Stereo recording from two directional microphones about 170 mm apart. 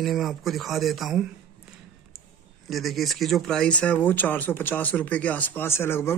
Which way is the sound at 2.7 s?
Centre (ahead or behind).